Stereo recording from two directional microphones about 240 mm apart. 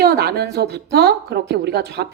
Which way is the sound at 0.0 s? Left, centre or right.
Right.